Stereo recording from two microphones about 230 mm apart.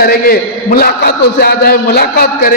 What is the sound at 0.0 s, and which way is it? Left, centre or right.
A man's voice, left.